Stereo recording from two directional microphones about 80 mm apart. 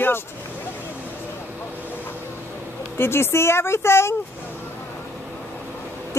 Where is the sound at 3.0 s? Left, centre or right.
Left.